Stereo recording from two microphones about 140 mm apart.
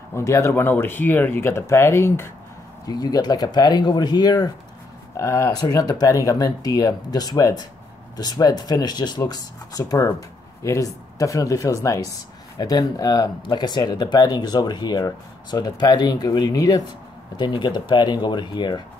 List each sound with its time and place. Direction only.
0.1 s speech: 20° left (ahead or behind)
2.9 s speech: 30° left (ahead or behind)